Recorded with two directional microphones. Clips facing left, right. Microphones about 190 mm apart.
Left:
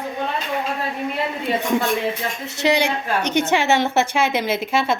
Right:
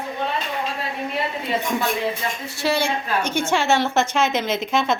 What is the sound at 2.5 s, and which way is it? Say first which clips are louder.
A woman's voice: left 3 dB; 20° left (ahead or behind).